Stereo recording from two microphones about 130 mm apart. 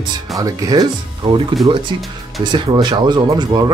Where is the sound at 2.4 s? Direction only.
35° right (ahead or behind).